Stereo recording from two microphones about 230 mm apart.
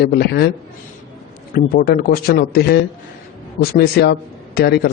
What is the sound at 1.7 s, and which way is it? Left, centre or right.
A man's voice, left.